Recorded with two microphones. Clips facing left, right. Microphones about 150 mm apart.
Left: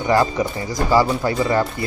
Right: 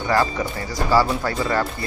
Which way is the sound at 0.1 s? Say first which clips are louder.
Left 3 dB; 15° left (ahead or behind).